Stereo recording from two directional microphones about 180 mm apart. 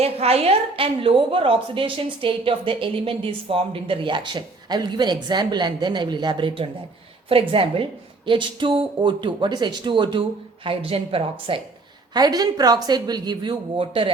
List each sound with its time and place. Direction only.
0.0 s a woman's voice: 35° right (ahead or behind)